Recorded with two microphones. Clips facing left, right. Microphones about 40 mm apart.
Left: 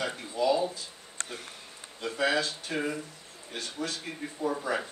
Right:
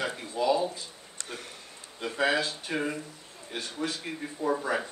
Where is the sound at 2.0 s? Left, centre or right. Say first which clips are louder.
Right 1 dB; centre.